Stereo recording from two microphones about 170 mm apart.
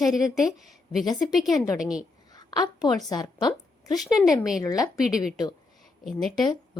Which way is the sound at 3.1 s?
25° left (ahead or behind).